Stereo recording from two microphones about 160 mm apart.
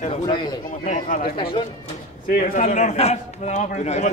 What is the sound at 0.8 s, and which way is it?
Speech, 55° left (ahead or behind).